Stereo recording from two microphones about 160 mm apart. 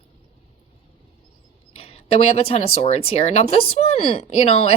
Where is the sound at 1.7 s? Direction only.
35° left (ahead or behind).